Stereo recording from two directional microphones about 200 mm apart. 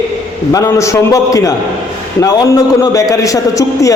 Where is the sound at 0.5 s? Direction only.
15° left (ahead or behind).